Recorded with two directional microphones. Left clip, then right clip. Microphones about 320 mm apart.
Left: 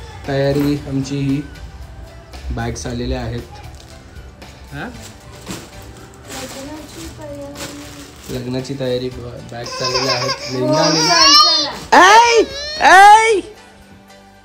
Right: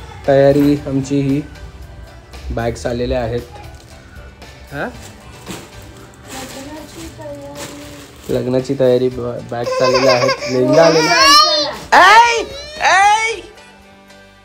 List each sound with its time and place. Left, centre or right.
0.2 s speech: centre
4.7 s music: centre
6.2 s a sound: centre
8.3 s speech: centre
11.9 s babbling: left
12.4 s a sound: centre
12.7 s speech: centre
13.1 s music: left